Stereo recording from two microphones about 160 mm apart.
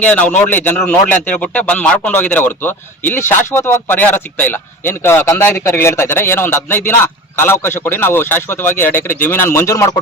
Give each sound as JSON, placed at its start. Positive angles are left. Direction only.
{"t": 0.0, "sound": "speech", "side_deg": 10}